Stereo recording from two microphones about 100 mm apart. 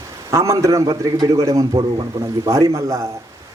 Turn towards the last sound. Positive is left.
turn(degrees=-30)  # may be behind; listen again after turning